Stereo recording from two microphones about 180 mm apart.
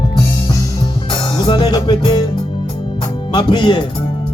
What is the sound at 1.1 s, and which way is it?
Music, 25° left (ahead or behind).